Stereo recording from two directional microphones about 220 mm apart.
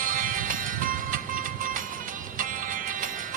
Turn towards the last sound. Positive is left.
turn(degrees=-40)  # may be behind; listen again after turning